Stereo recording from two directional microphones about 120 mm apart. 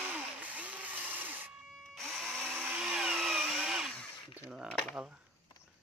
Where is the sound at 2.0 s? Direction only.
Centre (ahead or behind).